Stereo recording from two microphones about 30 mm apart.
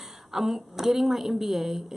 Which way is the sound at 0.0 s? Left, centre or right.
Centre.